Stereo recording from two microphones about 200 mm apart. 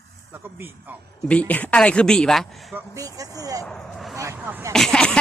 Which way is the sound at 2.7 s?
15° right (ahead or behind).